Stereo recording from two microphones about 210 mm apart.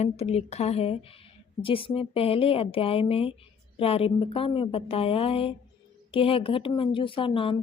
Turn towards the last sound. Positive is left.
turn(degrees=25)  # may be behind; listen again after turning